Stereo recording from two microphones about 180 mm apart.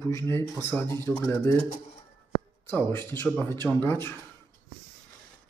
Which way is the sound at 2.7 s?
10° left (ahead or behind).